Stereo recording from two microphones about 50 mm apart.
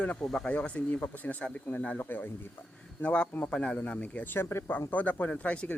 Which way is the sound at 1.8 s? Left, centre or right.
Left.